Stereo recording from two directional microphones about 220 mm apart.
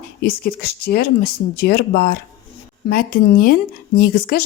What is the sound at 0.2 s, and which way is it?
A woman's voice, 45° left (ahead or behind).